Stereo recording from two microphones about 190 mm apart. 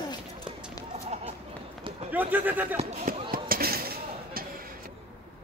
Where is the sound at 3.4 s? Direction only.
50° right (ahead or behind).